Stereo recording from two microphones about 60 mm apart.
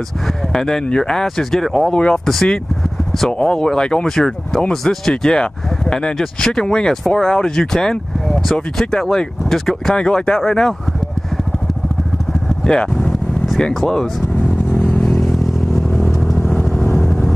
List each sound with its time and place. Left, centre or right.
0.5 s speech: centre
1.9 s speech: centre
2.2 s speech: centre
12.6 s vehicle: centre
13.7 s speech: centre
14.7 s vehicle: left
15.0 s vehicle: centre
16.3 s vehicle: left
16.9 s vehicle: centre